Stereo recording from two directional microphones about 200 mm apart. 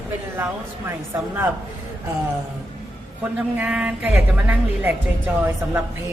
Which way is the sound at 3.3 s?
5° right (ahead or behind).